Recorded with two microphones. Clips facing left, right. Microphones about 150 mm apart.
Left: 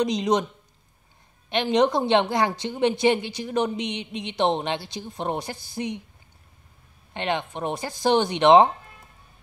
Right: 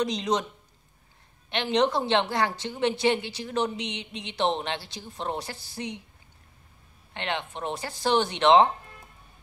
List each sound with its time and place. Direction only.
0.0 s a woman's voice: 15° left (ahead or behind)
1.5 s a woman's voice: 15° left (ahead or behind)
7.2 s a woman's voice: 15° left (ahead or behind)